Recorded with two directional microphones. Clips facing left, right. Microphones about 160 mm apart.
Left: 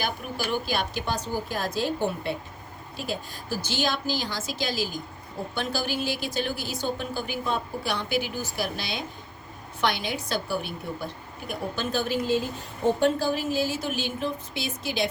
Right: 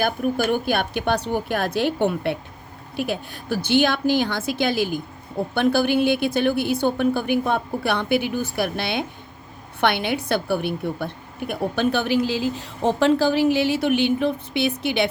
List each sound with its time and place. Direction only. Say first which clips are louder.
0.0 s a woman's voice: right 9 dB; 55° right (ahead or behind)